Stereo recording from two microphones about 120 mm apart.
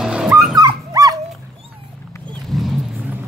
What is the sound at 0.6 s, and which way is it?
Dog, 30° right (ahead or behind).